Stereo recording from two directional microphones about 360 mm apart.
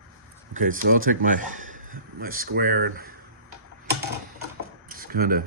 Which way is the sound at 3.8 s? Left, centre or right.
Right.